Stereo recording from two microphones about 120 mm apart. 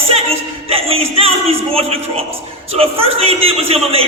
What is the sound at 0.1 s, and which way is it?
Speech, 55° right (ahead or behind).